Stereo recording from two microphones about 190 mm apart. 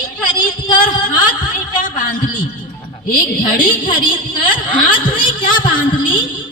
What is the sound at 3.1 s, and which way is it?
A woman's voice, 45° left (ahead or behind).